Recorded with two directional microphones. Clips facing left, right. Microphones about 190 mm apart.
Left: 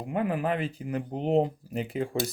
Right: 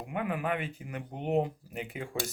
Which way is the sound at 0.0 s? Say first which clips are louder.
Left 5 dB; 35° left (ahead or behind).